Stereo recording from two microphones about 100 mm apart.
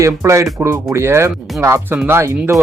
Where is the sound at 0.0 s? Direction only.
30° right (ahead or behind).